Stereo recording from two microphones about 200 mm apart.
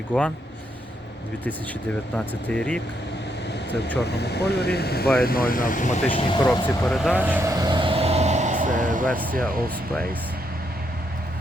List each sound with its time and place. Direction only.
0.1 s speech: 5° left (ahead or behind)
2.1 s speech: 5° left (ahead or behind)
4.0 s speech: 55° left (ahead or behind); by 6.1 s 40° left (ahead or behind)
6.1 s speech: 25° left (ahead or behind)
6.8 s vehicle: 5° left (ahead or behind); by 9.2 s 40° right (ahead or behind)
9.4 s speech: 5° left (ahead or behind)